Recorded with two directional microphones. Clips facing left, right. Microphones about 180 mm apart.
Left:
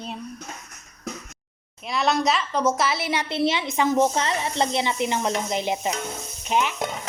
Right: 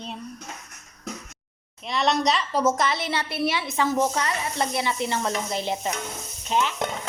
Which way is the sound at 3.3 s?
20° left (ahead or behind).